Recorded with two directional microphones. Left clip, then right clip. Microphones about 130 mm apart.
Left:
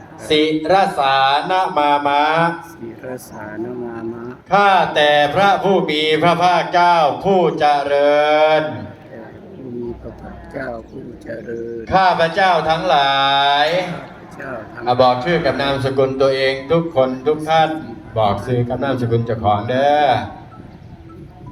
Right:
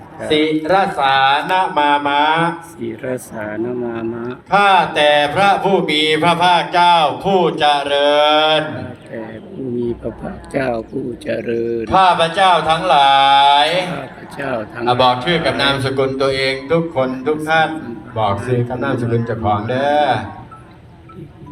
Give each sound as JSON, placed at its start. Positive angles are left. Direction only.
{"t": 0.3, "sound": "mantra", "side_deg": 15}
{"t": 3.0, "sound": "speech", "side_deg": -35}
{"t": 4.4, "sound": "speech", "side_deg": 50}
{"t": 10.5, "sound": "speech", "side_deg": -40}
{"t": 11.9, "sound": "speech", "side_deg": 25}
{"t": 14.3, "sound": "a man's voice", "side_deg": -55}
{"t": 14.8, "sound": "a man's voice", "side_deg": 40}